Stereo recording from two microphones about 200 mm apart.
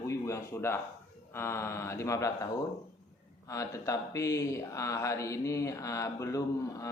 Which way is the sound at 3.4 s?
15° left (ahead or behind).